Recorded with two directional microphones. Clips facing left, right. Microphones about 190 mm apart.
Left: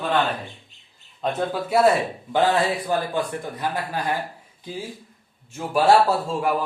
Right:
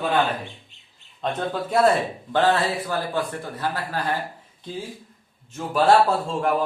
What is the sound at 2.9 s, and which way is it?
Speech, 15° left (ahead or behind).